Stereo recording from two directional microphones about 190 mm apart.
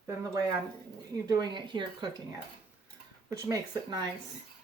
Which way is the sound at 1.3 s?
20° right (ahead or behind).